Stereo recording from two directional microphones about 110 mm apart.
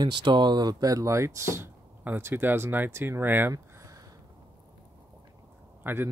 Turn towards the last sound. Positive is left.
turn(degrees=-20)  # may be behind; listen again after turning